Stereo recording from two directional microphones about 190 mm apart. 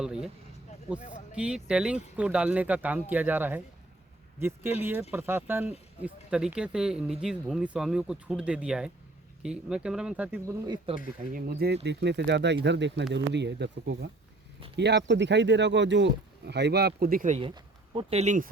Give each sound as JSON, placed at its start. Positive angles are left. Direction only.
{"t": 0.0, "sound": "a sound", "side_deg": -5}
{"t": 1.3, "sound": "speech", "side_deg": -5}
{"t": 10.9, "sound": "speech", "side_deg": -30}
{"t": 11.3, "sound": "speech", "side_deg": -50}
{"t": 17.4, "sound": "a sound", "side_deg": -25}
{"t": 18.2, "sound": "speech", "side_deg": -40}